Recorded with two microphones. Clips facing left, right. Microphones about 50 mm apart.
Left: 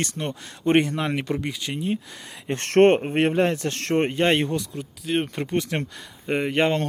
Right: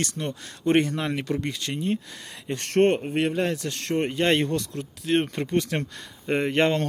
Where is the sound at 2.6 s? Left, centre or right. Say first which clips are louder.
Left 4 dB; left.